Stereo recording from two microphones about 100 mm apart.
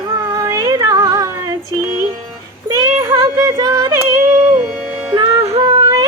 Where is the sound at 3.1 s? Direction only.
30° right (ahead or behind).